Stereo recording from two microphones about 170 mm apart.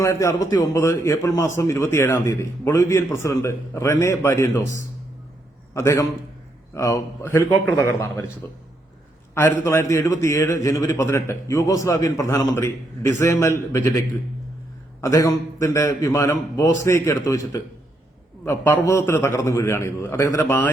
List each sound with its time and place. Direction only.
0.0 s a man's voice: 15° left (ahead or behind)
15.0 s a man's voice: 20° left (ahead or behind)